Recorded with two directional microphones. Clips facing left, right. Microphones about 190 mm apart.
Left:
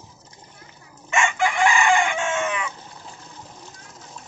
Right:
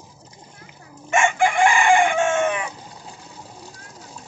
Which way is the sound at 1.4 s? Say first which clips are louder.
Right 1 dB; 50° right (ahead or behind).